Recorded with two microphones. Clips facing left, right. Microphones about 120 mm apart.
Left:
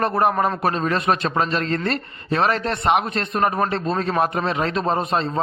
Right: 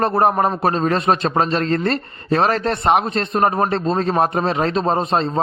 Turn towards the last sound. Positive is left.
turn(degrees=-35)  # may be behind; listen again after turning